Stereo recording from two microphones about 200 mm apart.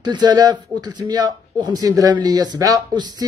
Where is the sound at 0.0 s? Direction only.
20° right (ahead or behind).